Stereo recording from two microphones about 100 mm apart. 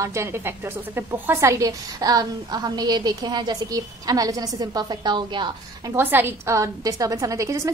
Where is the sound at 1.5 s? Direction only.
35° right (ahead or behind).